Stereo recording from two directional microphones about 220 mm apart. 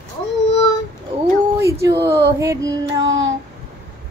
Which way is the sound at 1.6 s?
15° right (ahead or behind).